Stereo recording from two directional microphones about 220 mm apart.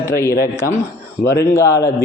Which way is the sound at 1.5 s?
15° left (ahead or behind).